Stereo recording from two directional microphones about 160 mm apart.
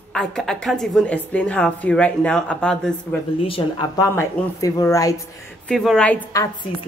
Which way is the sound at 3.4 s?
35° left (ahead or behind).